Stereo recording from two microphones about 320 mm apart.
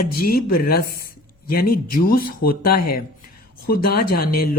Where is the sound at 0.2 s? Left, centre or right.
Left.